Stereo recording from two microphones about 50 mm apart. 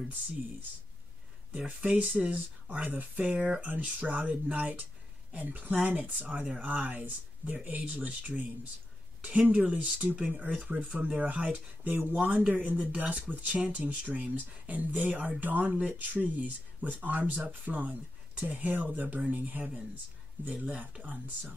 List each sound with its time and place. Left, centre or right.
1.8 s speech: right
3.6 s speech: right